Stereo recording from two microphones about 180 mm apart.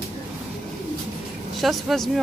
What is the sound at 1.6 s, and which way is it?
Speech, centre (ahead or behind).